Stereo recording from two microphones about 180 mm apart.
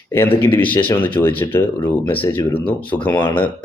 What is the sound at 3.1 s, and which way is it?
Speech, 25° left (ahead or behind).